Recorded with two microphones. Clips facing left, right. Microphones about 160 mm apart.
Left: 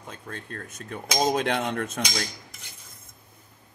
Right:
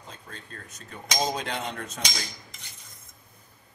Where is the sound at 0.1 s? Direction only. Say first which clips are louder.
Left 7 dB; 60° left (ahead or behind).